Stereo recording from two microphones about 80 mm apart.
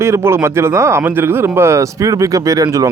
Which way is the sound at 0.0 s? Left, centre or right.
Right.